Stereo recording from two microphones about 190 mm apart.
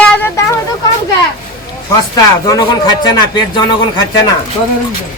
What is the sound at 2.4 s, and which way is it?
A man's voice, 20° left (ahead or behind).